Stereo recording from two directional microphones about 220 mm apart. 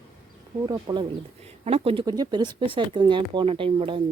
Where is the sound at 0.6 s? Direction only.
20° right (ahead or behind).